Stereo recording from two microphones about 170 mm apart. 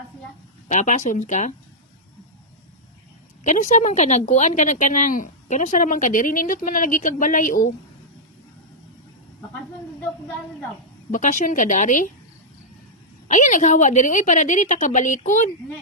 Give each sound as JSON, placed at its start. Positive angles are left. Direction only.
{"t": 0.7, "sound": "a woman's voice", "side_deg": 45}
{"t": 3.4, "sound": "a woman's voice", "side_deg": 45}
{"t": 11.1, "sound": "a woman's voice", "side_deg": 50}
{"t": 13.2, "sound": "a woman's voice", "side_deg": 50}